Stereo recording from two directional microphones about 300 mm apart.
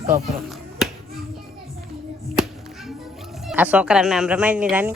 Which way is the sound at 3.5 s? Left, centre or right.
Centre.